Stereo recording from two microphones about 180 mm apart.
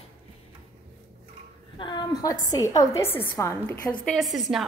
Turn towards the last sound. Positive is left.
turn(degrees=0)  # may be behind; listen again after turning